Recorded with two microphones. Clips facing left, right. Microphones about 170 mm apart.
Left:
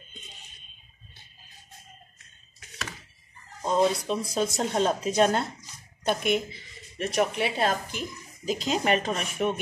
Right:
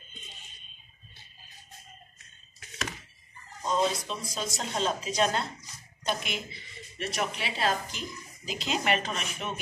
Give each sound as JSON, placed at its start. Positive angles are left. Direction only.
{"t": 3.7, "sound": "speech", "side_deg": 55}
{"t": 8.5, "sound": "speech", "side_deg": 40}